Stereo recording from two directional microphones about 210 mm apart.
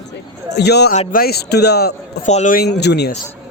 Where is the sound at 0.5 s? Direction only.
50° left (ahead or behind).